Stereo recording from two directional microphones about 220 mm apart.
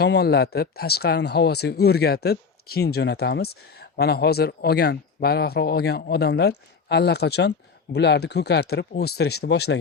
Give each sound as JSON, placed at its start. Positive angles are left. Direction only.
{"t": 0.0, "sound": "speech", "side_deg": 50}